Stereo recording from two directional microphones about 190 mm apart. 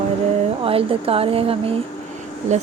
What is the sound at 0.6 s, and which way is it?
Speech, 30° right (ahead or behind).